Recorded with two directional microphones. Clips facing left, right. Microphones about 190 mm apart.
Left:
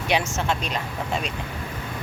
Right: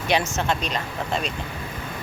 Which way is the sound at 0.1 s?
10° left (ahead or behind).